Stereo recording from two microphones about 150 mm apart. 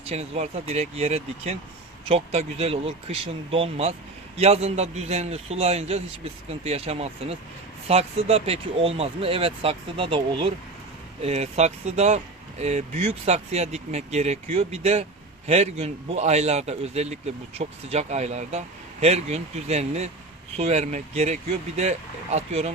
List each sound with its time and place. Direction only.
0.0 s a man's voice: 45° right (ahead or behind)